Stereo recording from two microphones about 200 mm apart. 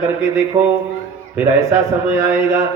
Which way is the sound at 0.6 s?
30° right (ahead or behind).